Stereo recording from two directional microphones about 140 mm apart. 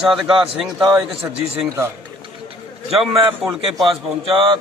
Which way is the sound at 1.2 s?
15° right (ahead or behind).